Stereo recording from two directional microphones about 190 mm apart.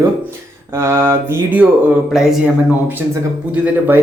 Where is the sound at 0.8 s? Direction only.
15° right (ahead or behind).